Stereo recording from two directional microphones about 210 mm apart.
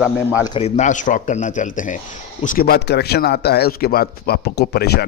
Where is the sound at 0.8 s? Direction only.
35° left (ahead or behind).